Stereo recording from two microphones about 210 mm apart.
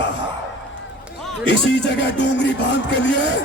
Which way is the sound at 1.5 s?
55° left (ahead or behind).